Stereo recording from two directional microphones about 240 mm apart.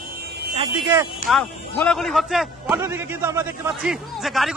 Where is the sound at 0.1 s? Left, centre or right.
Right.